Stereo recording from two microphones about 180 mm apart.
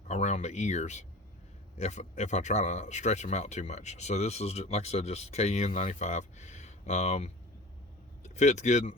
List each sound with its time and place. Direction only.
0.1 s speech: 40° left (ahead or behind)